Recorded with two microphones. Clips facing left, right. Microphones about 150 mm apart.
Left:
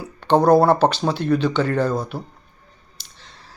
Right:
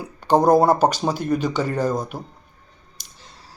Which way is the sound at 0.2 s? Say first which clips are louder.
Left 1 dB; 10° right (ahead or behind).